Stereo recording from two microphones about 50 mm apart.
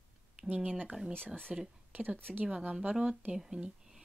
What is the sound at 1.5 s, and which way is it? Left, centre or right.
Speech, centre.